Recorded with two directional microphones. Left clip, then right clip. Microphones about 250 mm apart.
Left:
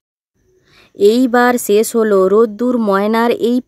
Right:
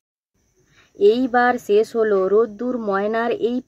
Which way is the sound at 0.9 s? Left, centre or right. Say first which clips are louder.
Left 5 dB; left.